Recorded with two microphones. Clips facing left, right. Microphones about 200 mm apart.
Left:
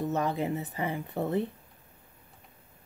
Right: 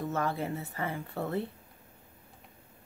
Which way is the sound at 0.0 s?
20° left (ahead or behind).